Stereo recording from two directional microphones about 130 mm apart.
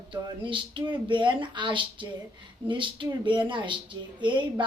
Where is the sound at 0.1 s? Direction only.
40° right (ahead or behind).